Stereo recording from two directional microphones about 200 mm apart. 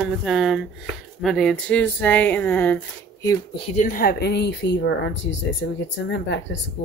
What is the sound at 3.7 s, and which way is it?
A woman's voice, 45° left (ahead or behind).